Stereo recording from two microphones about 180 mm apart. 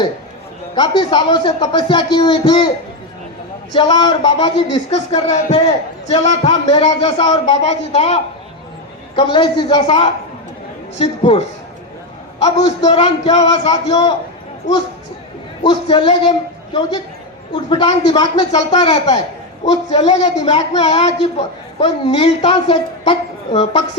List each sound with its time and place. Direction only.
0.8 s speech: 25° left (ahead or behind)
3.7 s speech: 25° left (ahead or behind)
5.3 s a woman's voice: 40° left (ahead or behind)
6.7 s speech: 25° left (ahead or behind)
7.3 s a woman's voice: 40° left (ahead or behind)
9.1 s a woman's voice: 25° left (ahead or behind)
15.6 s speech: 25° left (ahead or behind)
17.5 s speech: 25° left (ahead or behind)
18.9 s a woman's voice: 40° left (ahead or behind)